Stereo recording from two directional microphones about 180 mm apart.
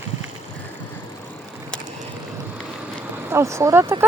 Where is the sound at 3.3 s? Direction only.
15° right (ahead or behind).